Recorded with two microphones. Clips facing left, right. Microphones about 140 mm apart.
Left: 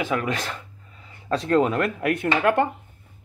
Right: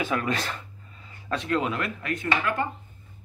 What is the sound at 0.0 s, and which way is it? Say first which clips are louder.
Speech: left 2 dB; 15° left (ahead or behind).